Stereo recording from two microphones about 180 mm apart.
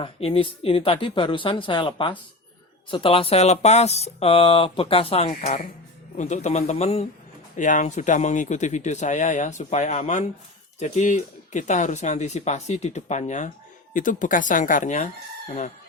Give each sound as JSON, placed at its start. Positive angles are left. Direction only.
{"t": 0.0, "sound": "speech", "side_deg": 30}